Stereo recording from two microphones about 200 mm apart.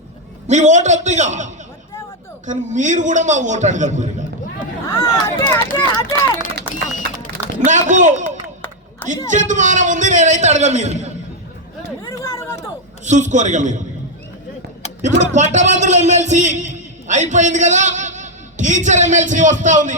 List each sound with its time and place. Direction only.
0.4 s a man's voice: 35° right (ahead or behind)
2.5 s a man's voice: 40° right (ahead or behind)
4.9 s speech: 15° left (ahead or behind)
6.8 s run: 40° left (ahead or behind)
7.6 s a man's voice: 40° right (ahead or behind)
9.3 s a man's voice: 40° right (ahead or behind)
12.0 s chatter: 15° left (ahead or behind)
13.1 s a man's voice: 35° right (ahead or behind)
15.4 s a man's voice: 35° right (ahead or behind)